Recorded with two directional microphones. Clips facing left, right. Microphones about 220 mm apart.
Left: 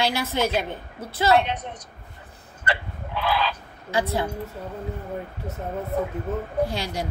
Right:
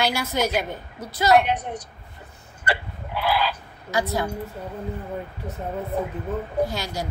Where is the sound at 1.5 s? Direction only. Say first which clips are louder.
Right 5 dB; 30° right (ahead or behind).